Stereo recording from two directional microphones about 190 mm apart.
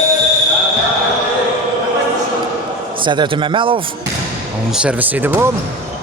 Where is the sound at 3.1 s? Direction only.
25° right (ahead or behind).